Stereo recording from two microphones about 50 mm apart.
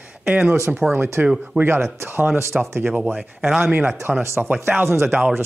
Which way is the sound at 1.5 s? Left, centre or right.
Right.